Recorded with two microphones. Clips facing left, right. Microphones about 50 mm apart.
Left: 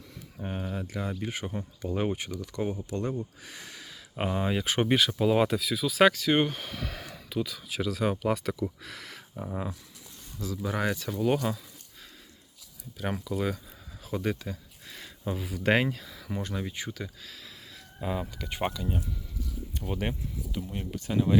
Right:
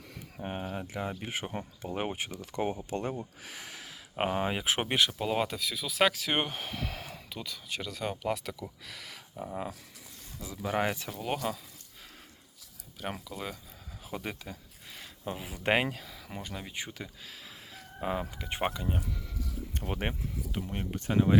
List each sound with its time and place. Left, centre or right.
0.3 s speech: centre
3.4 s a sound: centre
4.2 s speech: right
7.3 s speech: centre
10.3 s speech: right
11.1 s speech: centre
13.0 s speech: centre
14.1 s a sound: centre
15.4 s speech: right
16.3 s speech: centre
18.0 s speech: centre
19.7 s speech: right
20.0 s speech: right